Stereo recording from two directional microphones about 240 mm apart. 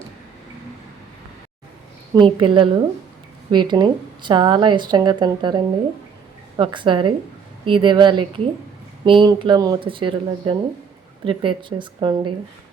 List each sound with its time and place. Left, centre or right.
2.1 s a woman's voice: right